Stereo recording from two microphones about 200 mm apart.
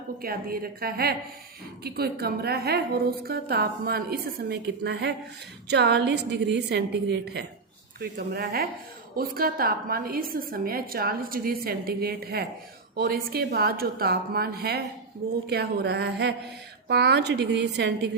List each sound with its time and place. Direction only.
0.2 s a woman's voice: 45° right (ahead or behind)